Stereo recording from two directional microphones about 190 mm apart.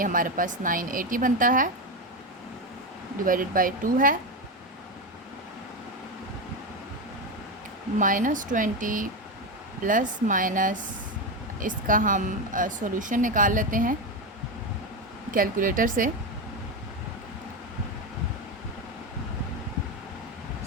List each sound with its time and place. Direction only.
0.0 s a woman's voice: 45° right (ahead or behind)
3.2 s a woman's voice: 45° right (ahead or behind)
7.9 s a woman's voice: 45° right (ahead or behind)
15.3 s a woman's voice: 45° right (ahead or behind)